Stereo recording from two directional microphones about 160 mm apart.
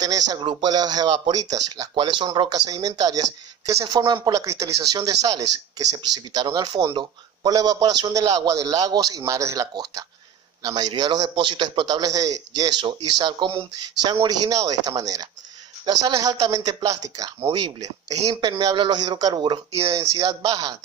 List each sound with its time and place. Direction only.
0.0 s speech: 25° right (ahead or behind)